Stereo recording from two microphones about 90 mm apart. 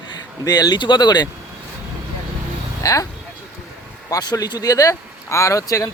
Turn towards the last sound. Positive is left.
turn(degrees=40)  # may be behind; listen again after turning